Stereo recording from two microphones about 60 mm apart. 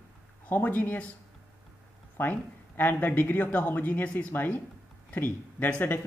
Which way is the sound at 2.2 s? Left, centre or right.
Left.